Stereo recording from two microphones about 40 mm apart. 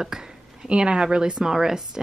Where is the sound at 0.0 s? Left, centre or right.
Centre.